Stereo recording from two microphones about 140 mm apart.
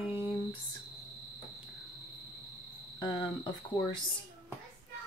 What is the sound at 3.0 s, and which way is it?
Cricket, 30° left (ahead or behind).